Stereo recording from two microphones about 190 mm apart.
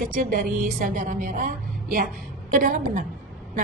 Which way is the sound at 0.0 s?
45° right (ahead or behind).